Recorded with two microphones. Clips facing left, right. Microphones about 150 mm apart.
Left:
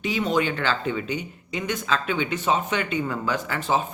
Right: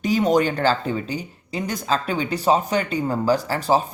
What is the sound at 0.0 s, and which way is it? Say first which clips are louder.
Speech: right 5 dB; 40° right (ahead or behind).